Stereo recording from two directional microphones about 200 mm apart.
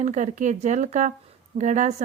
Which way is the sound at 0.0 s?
35° right (ahead or behind).